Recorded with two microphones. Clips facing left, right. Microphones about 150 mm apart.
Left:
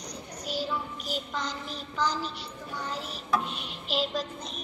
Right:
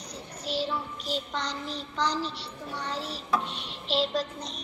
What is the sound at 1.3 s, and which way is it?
A woman's voice, 5° left (ahead or behind).